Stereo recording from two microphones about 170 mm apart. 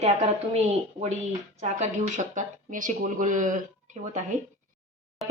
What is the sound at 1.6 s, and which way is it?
Speech, 45° right (ahead or behind).